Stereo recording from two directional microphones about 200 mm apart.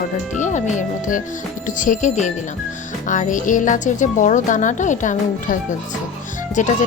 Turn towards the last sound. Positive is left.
turn(degrees=40)  # may be behind; listen again after turning